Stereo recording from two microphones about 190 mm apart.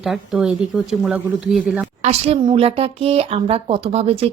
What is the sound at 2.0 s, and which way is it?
Speech, 35° right (ahead or behind).